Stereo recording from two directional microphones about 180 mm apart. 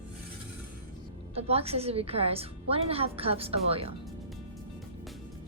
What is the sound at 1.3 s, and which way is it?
A woman's voice, 35° right (ahead or behind).